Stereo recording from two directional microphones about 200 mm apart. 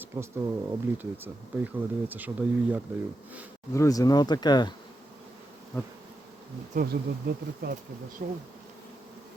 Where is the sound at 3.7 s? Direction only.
15° left (ahead or behind).